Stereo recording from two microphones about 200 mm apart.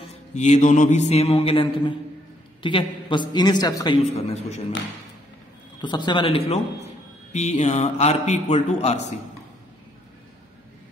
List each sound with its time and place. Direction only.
0.3 s a man's voice: 35° left (ahead or behind); by 4.0 s 20° left (ahead or behind)
4.0 s a man's voice: 35° left (ahead or behind)
5.8 s a man's voice: 20° left (ahead or behind)